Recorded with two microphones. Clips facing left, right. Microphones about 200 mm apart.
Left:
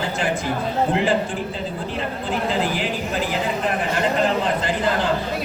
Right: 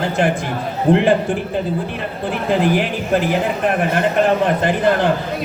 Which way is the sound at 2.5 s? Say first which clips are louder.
Right 9 dB; 60° right (ahead or behind).